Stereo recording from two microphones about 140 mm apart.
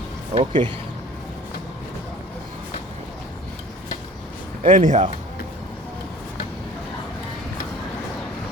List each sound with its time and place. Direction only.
0.3 s speech: 35° right (ahead or behind)
4.6 s speech: 65° right (ahead or behind)